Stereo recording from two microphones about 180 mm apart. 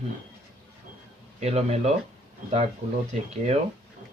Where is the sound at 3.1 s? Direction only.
35° right (ahead or behind).